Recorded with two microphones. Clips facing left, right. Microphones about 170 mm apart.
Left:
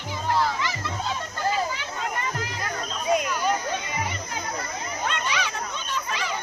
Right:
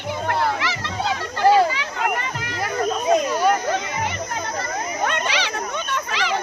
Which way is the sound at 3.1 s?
30° right (ahead or behind).